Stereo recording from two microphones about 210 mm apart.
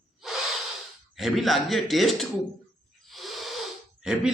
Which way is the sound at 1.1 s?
Centre (ahead or behind).